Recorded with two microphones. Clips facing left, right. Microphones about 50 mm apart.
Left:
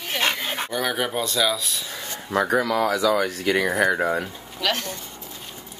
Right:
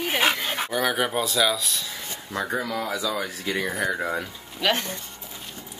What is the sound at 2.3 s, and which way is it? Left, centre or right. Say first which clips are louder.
Speech: left 7 dB; left.